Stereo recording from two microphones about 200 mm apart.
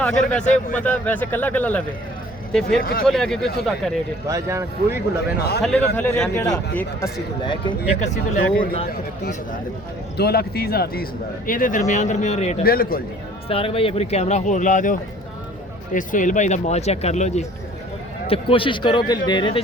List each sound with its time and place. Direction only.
0.0 s a man's voice: 5° left (ahead or behind)
4.3 s speech: 15° right (ahead or behind)
5.4 s speech: 50° left (ahead or behind)
5.6 s a man's voice: 5° left (ahead or behind)
7.4 s speech: 25° left (ahead or behind)
7.9 s speech: 35° left (ahead or behind)
8.9 s speech: 50° left (ahead or behind); by 12.6 s 35° left (ahead or behind)
12.6 s speech: 45° left (ahead or behind)
13.5 s speech: 25° left (ahead or behind)